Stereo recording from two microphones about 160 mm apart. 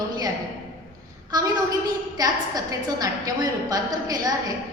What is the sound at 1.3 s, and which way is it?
A woman's voice, 25° right (ahead or behind).